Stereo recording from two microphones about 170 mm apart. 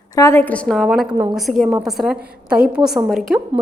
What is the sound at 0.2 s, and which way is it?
A woman's voice, 15° left (ahead or behind).